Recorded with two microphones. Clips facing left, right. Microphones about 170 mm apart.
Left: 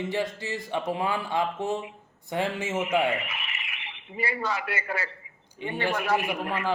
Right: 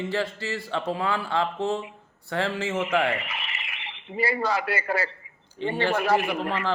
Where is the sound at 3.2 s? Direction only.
35° right (ahead or behind).